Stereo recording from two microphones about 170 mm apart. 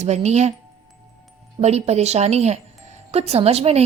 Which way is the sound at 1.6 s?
40° right (ahead or behind).